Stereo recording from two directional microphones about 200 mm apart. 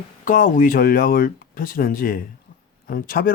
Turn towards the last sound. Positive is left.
turn(degrees=45)  # may be behind; listen again after turning